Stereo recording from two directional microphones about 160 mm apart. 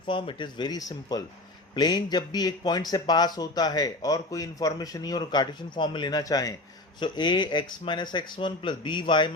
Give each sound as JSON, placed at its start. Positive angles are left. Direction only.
{"t": 0.0, "sound": "speech", "side_deg": 30}